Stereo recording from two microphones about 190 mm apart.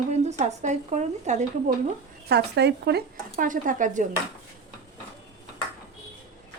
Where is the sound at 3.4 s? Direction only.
45° right (ahead or behind).